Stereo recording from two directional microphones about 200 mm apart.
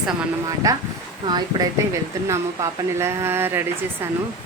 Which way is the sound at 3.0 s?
10° right (ahead or behind).